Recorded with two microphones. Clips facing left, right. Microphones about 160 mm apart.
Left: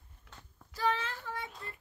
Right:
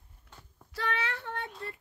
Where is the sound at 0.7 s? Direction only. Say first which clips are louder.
Left 1 dB; 70° right (ahead or behind).